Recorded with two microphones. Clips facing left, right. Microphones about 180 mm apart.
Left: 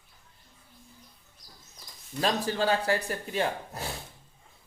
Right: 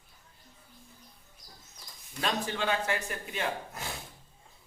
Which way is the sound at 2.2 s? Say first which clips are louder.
Left 5 dB; 35° left (ahead or behind).